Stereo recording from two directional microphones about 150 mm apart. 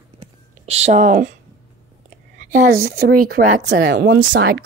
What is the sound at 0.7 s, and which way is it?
Speech, 45° right (ahead or behind).